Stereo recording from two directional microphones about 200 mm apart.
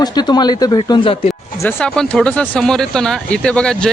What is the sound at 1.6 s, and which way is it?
Speech, 10° left (ahead or behind).